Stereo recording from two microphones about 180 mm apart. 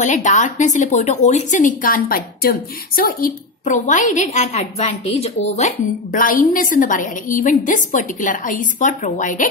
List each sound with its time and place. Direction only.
0.0 s a woman's voice: 45° left (ahead or behind)